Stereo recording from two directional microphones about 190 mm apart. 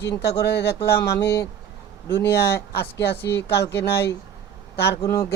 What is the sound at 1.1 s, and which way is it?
Speech, 15° left (ahead or behind).